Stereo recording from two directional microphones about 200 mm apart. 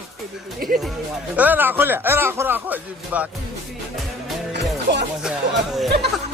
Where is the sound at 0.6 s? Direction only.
50° right (ahead or behind).